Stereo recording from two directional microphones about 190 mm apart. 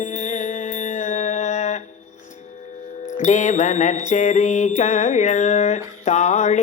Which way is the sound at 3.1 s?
40° left (ahead or behind).